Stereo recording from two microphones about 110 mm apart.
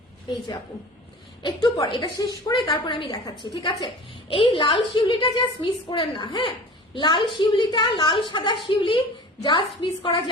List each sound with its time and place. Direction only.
1.4 s a woman's voice: 40° left (ahead or behind)
4.3 s a woman's voice: 50° left (ahead or behind)